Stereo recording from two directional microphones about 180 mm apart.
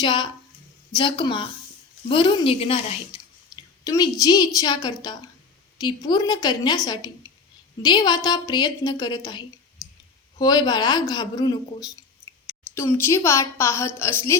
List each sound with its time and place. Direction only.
0.0 s speech: 25° left (ahead or behind)